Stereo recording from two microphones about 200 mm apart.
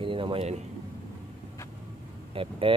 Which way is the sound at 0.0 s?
25° right (ahead or behind).